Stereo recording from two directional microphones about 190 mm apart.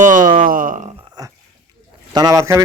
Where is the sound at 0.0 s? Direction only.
45° right (ahead or behind).